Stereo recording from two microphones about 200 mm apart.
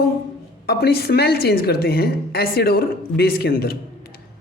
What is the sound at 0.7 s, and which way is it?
A woman's voice, 50° left (ahead or behind).